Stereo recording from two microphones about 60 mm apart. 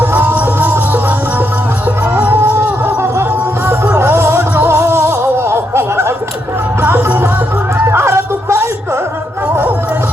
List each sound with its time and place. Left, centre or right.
0.0 s music: right
2.1 s a sound: right
2.8 s music: right